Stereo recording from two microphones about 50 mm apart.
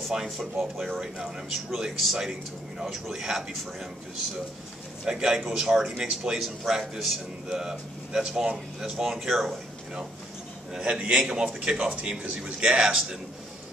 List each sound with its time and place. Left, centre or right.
0.1 s a man's voice: centre
5.0 s speech: centre
10.8 s speech: right